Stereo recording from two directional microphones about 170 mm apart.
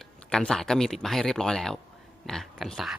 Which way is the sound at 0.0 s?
5° left (ahead or behind).